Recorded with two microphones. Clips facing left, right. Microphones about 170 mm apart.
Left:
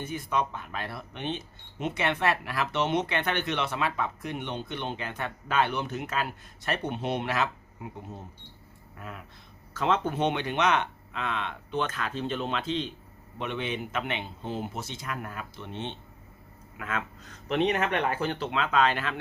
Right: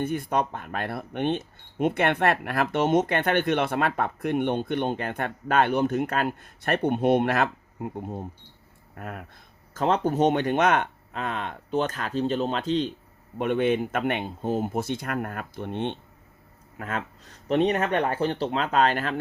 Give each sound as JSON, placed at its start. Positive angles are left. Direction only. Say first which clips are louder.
{"t": 0.0, "sound": "speech", "louder": "right 4 dB", "side_deg": -55}
{"t": 9.7, "sound": "speech", "louder": "right 4 dB", "side_deg": -40}
{"t": 16.7, "sound": "speech", "louder": "right 2 dB", "side_deg": -35}